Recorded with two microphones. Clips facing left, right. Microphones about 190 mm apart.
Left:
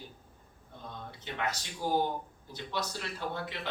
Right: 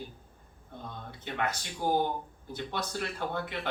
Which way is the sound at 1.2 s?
55° right (ahead or behind).